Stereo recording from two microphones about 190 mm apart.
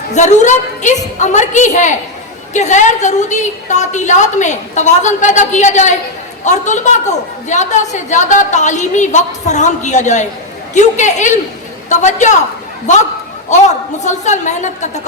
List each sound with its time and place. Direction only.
0.1 s a woman's voice: 40° left (ahead or behind)